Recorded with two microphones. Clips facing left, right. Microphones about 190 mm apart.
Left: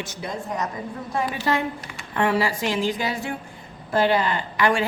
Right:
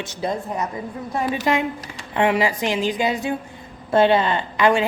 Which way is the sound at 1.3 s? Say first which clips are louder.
Right 3 dB; 15° right (ahead or behind).